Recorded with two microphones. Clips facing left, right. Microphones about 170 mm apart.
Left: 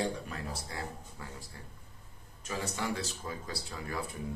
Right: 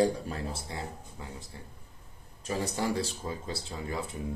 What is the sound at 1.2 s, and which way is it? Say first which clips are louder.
Speech: right 3 dB; 20° right (ahead or behind).